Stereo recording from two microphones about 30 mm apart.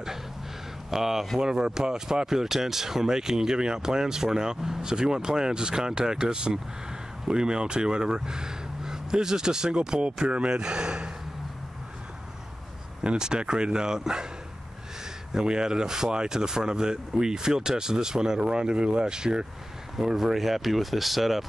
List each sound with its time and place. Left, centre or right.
0.8 s speech: centre
1.4 s speech: right
10.2 s speech: right
10.6 s speech: right
13.0 s speech: right
15.3 s speech: right
20.0 s speech: centre